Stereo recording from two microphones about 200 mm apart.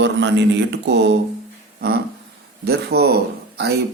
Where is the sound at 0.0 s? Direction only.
60° right (ahead or behind).